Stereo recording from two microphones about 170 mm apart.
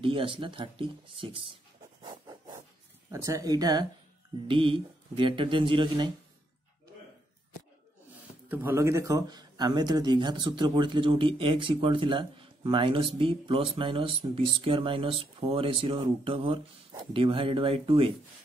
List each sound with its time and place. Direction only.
0.0 s speech: 30° right (ahead or behind)
2.0 s a sound: 25° right (ahead or behind)
3.1 s speech: 20° right (ahead or behind)
8.5 s speech: 15° right (ahead or behind); by 18.1 s 30° right (ahead or behind)